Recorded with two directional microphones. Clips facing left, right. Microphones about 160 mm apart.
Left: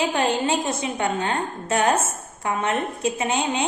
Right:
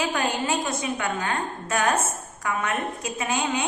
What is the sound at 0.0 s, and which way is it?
A woman's voice, 30° left (ahead or behind).